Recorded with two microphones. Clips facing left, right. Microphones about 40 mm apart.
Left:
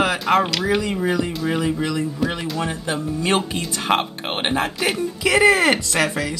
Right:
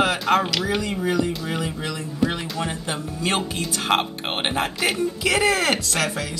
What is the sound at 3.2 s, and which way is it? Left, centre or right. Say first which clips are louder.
Speech: left 2 dB; left.